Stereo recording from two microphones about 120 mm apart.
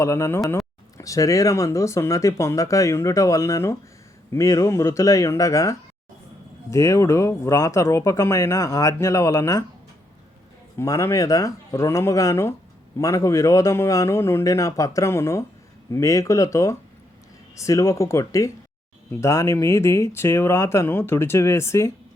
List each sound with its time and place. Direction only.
0.0 s speech: 25° left (ahead or behind)
10.8 s speech: 25° left (ahead or behind)